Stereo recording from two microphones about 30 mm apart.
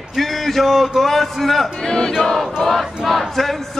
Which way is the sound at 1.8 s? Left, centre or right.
Left.